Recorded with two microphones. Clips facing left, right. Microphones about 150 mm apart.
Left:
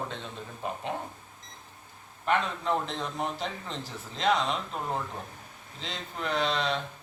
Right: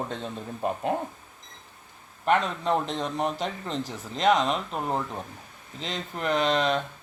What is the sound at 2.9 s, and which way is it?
Speech, centre (ahead or behind).